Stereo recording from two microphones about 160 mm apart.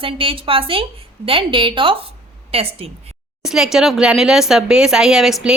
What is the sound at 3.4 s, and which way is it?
A woman's voice, 5° right (ahead or behind).